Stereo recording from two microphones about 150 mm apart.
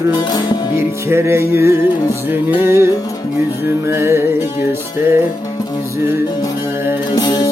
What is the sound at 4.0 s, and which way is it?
Music, 15° right (ahead or behind).